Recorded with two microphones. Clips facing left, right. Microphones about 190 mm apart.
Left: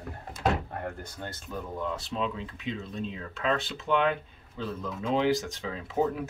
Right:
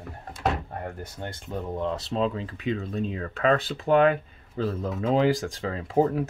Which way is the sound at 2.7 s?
55° right (ahead or behind).